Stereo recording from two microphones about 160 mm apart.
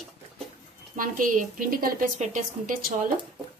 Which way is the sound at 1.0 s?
55° right (ahead or behind).